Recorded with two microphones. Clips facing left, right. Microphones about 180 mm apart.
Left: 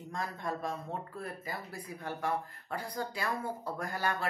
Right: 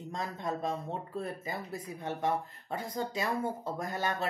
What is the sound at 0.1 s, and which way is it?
Speech, 20° right (ahead or behind).